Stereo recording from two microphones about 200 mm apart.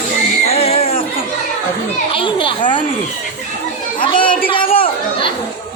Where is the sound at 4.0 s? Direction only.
25° left (ahead or behind).